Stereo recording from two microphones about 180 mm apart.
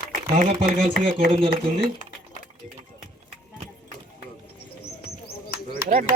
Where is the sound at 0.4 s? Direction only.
40° right (ahead or behind).